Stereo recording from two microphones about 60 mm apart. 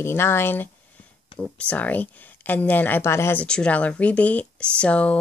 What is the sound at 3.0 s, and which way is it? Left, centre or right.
Speech, left.